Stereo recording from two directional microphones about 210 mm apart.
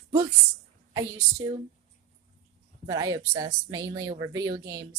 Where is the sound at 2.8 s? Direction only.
20° right (ahead or behind).